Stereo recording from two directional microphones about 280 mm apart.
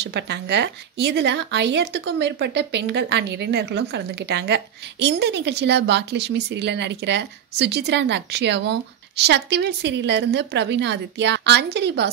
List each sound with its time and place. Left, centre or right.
0.0 s speech: right